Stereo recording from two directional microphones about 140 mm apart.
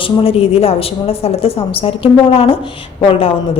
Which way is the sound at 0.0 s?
45° left (ahead or behind).